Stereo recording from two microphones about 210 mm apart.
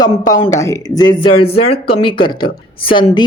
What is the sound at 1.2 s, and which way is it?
A woman's voice, 25° left (ahead or behind).